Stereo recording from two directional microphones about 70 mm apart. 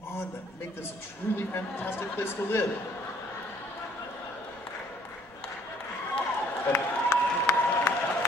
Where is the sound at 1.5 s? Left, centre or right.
Left.